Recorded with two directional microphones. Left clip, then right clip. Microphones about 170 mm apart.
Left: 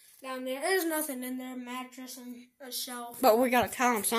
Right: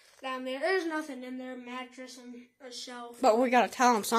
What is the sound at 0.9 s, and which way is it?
A woman's voice, 60° left (ahead or behind).